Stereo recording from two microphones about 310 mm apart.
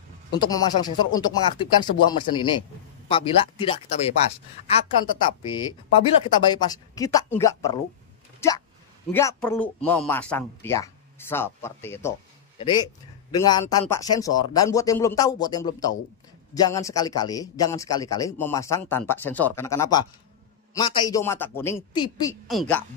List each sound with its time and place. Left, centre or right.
0.4 s speech: centre
6.2 s speech: centre
8.4 s a sound: centre
9.1 s speech: centre
22.5 s speech: centre